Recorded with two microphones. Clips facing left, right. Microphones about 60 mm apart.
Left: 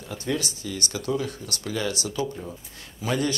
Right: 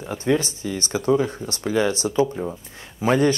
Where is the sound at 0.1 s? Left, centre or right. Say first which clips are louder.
Right 7 dB; right.